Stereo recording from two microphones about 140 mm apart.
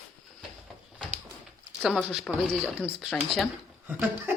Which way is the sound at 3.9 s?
10° right (ahead or behind).